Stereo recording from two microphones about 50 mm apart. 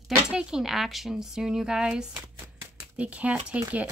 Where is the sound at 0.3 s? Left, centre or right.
Centre.